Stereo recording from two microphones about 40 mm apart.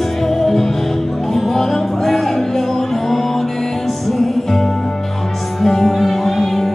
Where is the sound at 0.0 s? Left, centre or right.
Centre.